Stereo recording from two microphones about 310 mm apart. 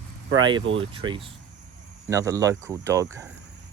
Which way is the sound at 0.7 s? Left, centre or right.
Centre.